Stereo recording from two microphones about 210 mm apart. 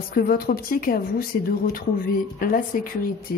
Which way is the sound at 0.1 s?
45° left (ahead or behind).